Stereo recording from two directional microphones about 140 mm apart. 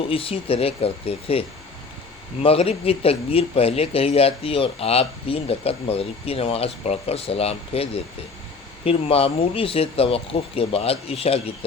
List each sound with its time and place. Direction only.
0.0 s speech: 40° left (ahead or behind)